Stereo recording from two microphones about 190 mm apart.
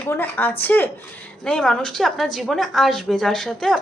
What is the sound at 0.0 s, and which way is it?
A woman's voice, 10° left (ahead or behind).